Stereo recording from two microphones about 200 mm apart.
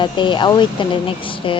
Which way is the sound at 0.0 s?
25° left (ahead or behind).